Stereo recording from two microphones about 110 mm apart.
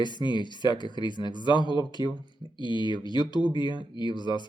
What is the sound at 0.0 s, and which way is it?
Speech, 45° left (ahead or behind).